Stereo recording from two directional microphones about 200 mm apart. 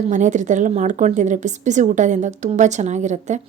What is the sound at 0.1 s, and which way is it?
Speech, 40° right (ahead or behind).